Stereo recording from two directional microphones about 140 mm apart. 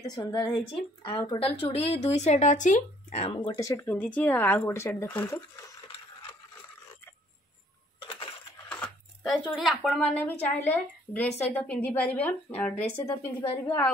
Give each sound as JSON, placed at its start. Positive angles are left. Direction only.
{"t": 0.0, "sound": "a woman's voice", "side_deg": 25}
{"t": 3.9, "sound": "a woman's voice", "side_deg": 10}
{"t": 8.0, "sound": "coin", "side_deg": 40}
{"t": 8.6, "sound": "a sound", "side_deg": 10}
{"t": 9.8, "sound": "a woman's voice", "side_deg": 10}